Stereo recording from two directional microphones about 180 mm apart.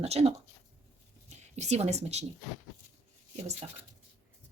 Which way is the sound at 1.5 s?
40° right (ahead or behind).